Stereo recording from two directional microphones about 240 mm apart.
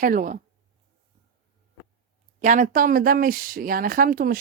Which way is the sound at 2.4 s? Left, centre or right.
Right.